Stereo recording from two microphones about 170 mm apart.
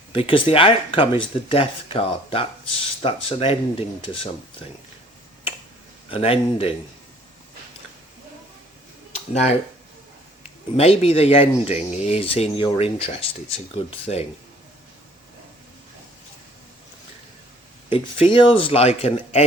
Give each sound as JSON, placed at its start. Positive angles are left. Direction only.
{"t": 0.1, "sound": "speech", "side_deg": 30}
{"t": 6.1, "sound": "speech", "side_deg": 35}
{"t": 9.3, "sound": "speech", "side_deg": 40}
{"t": 10.8, "sound": "speech", "side_deg": 35}
{"t": 17.8, "sound": "speech", "side_deg": 30}